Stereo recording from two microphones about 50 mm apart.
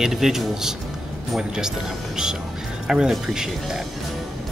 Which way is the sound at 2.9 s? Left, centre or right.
Centre.